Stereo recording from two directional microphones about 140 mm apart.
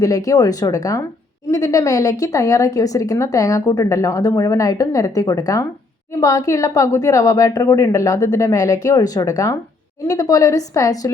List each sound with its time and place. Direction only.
0.0 s a woman's voice: 25° left (ahead or behind)